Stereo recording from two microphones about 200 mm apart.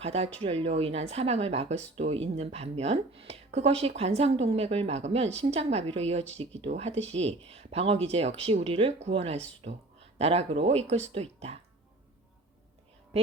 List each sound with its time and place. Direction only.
0.0 s speech: 30° right (ahead or behind)